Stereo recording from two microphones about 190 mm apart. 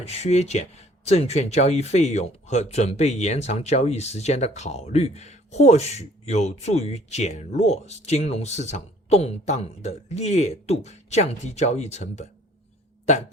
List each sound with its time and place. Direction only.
0.0 s speech: 35° left (ahead or behind)